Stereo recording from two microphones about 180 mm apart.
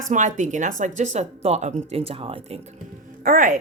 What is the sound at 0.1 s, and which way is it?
Speech, 40° right (ahead or behind).